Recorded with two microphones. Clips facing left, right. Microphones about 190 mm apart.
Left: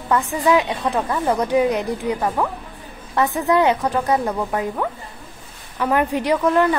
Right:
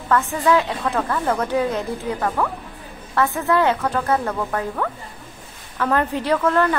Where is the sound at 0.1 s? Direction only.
15° left (ahead or behind).